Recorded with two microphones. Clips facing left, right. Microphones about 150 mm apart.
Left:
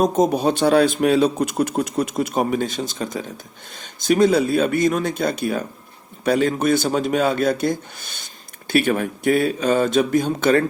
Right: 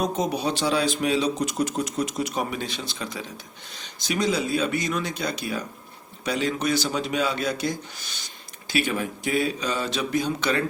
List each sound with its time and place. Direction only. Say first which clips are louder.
0.0 s speech: left 8 dB; 45° left (ahead or behind)